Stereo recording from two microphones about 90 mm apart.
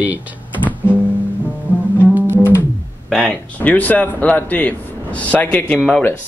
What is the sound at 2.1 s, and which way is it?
Music, 25° right (ahead or behind).